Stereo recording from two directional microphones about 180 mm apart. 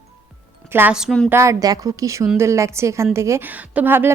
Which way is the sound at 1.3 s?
15° right (ahead or behind).